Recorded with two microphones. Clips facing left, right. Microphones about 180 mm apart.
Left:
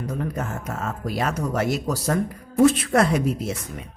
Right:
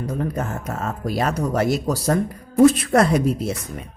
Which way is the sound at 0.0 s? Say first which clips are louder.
Right 3 dB; 35° right (ahead or behind).